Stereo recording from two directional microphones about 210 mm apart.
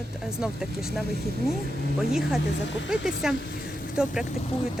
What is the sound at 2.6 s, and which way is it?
Speech, 60° left (ahead or behind).